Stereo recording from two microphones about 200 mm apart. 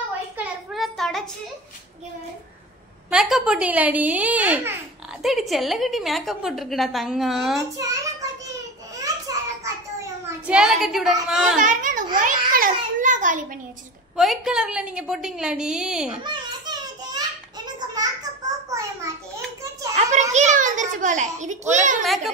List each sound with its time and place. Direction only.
0.4 s a sound: centre (ahead or behind)
3.1 s a woman's voice: centre (ahead or behind)
7.7 s child singing: 15° right (ahead or behind)
10.4 s a woman's voice: 5° right (ahead or behind)
11.6 s babbling: 40° right (ahead or behind)
14.1 s a woman's voice: centre (ahead or behind)
16.2 s children playing: 20° right (ahead or behind)
17.7 s a sound: 20° right (ahead or behind)
20.0 s a child's voice: 35° right (ahead or behind)
22.0 s a woman's voice: centre (ahead or behind)